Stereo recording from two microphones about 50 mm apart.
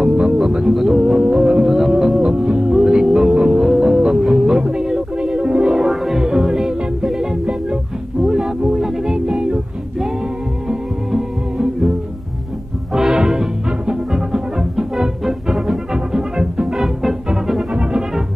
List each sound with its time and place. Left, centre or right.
0.0 s music: centre
13.1 s music: centre
16.6 s music: centre
17.7 s music: centre